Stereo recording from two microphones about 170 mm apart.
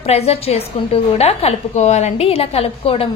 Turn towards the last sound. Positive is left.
turn(degrees=35)  # may be behind; listen again after turning